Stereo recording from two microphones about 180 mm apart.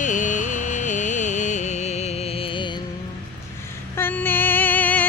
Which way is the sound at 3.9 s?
10° left (ahead or behind).